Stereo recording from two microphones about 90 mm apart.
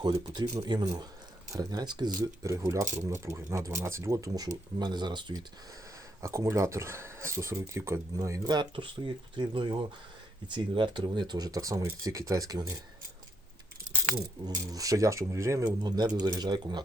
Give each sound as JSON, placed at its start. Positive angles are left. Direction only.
{"t": 0.0, "sound": "speech", "side_deg": -50}
{"t": 6.2, "sound": "speech", "side_deg": -35}
{"t": 8.7, "sound": "speech", "side_deg": -65}
{"t": 14.4, "sound": "speech", "side_deg": -40}
{"t": 15.6, "sound": "speech", "side_deg": -50}